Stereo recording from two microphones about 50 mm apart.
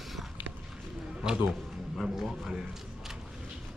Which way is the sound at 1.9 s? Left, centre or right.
Centre.